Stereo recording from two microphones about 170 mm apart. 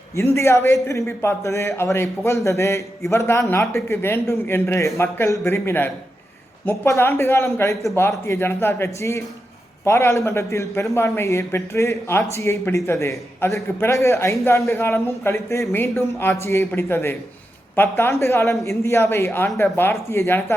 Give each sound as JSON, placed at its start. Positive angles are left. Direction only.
{"t": 0.2, "sound": "a man's voice", "side_deg": 15}